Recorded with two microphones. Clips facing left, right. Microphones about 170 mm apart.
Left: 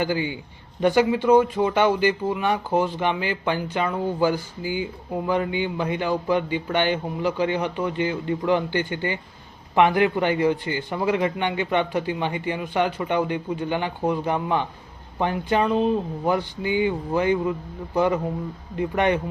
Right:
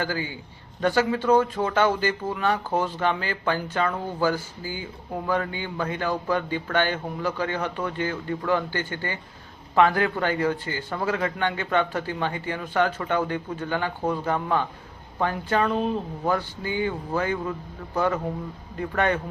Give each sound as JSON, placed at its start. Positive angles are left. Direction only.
{"t": 0.0, "sound": "a man's voice", "side_deg": 20}